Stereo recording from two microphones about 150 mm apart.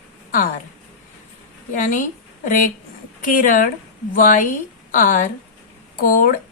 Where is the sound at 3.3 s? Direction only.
65° left (ahead or behind).